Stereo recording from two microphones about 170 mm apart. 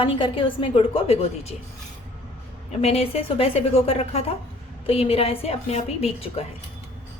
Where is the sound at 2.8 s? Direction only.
35° left (ahead or behind).